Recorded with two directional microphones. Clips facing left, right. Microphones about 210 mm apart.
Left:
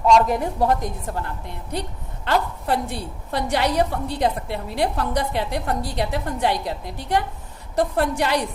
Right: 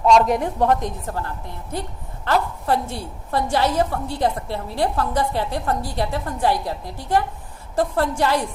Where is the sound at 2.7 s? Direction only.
15° left (ahead or behind).